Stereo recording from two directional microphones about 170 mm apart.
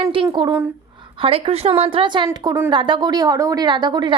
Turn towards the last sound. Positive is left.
turn(degrees=-25)  # may be behind; listen again after turning